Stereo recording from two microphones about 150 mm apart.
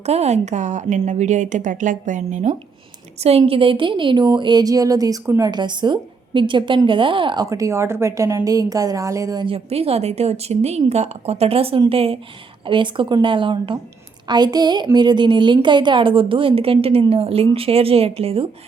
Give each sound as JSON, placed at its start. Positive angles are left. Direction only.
{"t": 0.0, "sound": "a woman's voice", "side_deg": -45}
{"t": 3.2, "sound": "a woman's voice", "side_deg": -40}
{"t": 9.6, "sound": "a woman's voice", "side_deg": -40}